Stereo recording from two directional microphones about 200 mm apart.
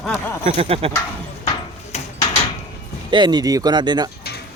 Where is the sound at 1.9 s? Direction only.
35° left (ahead or behind).